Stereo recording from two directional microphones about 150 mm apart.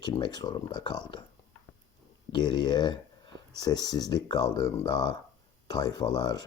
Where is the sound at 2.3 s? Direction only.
30° left (ahead or behind).